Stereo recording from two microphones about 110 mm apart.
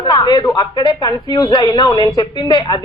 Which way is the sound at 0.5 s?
40° left (ahead or behind).